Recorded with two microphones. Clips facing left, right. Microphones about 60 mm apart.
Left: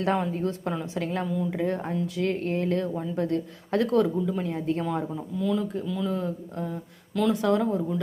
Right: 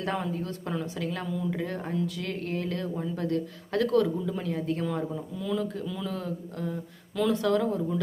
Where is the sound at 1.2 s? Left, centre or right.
Centre.